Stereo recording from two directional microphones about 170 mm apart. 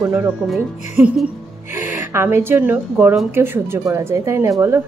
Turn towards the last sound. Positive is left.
turn(degrees=-15)  # may be behind; listen again after turning